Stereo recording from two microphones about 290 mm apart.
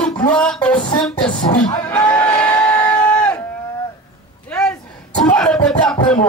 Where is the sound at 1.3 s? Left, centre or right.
Centre.